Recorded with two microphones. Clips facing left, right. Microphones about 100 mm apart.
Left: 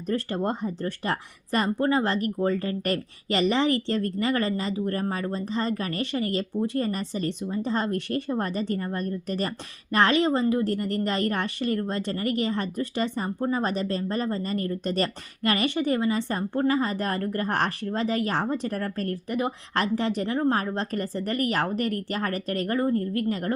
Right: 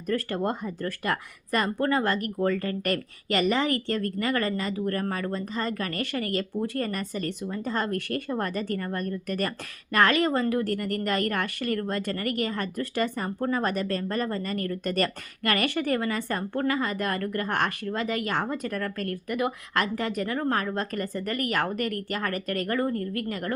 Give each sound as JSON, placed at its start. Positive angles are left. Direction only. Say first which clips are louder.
{"t": 0.1, "sound": "a woman's voice", "louder": "even", "side_deg": 25}
{"t": 20.7, "sound": "a woman's voice", "louder": "left 1 dB", "side_deg": 35}